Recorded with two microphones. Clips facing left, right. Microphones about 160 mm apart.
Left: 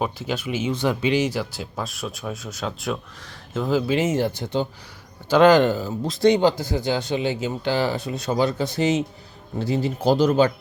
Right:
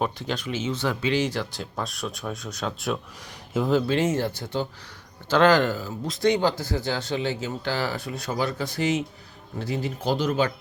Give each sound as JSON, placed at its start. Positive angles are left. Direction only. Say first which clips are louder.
{"t": 0.0, "sound": "speech", "louder": "left 2 dB", "side_deg": 5}
{"t": 3.7, "sound": "speech", "louder": "left 2 dB", "side_deg": 5}